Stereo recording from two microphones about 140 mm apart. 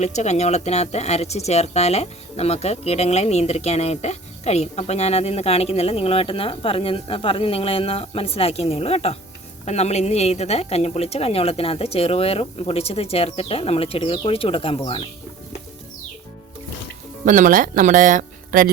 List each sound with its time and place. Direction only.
0.0 s speech: 55° left (ahead or behind)
17.2 s speech: 70° right (ahead or behind)